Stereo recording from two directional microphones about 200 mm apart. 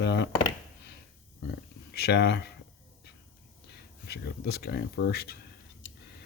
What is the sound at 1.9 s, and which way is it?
Speech, 55° left (ahead or behind).